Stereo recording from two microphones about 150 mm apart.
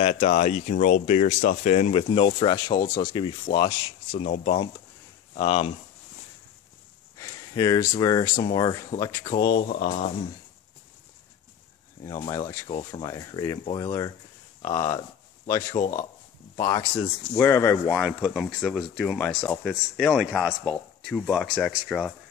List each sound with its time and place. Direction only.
0.0 s speech: 50° left (ahead or behind)
7.2 s speech: 25° left (ahead or behind)
9.3 s speech: 90° left
12.0 s speech: 20° left (ahead or behind)
12.6 s speech: 35° left (ahead or behind)
13.0 s speech: 25° left (ahead or behind)
18.2 s speech: centre (ahead or behind)